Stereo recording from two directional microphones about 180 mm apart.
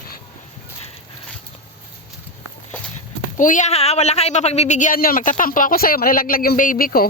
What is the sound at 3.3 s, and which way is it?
Speech, 45° left (ahead or behind).